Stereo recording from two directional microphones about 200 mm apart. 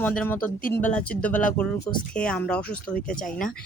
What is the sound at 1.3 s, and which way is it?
Speech, 40° left (ahead or behind).